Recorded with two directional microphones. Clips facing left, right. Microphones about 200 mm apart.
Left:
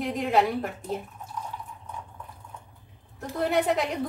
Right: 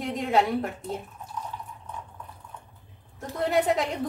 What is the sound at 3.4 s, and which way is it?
Speech, centre (ahead or behind).